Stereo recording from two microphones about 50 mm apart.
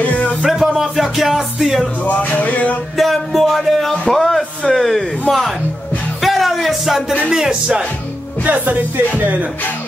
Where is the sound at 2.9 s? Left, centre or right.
Centre.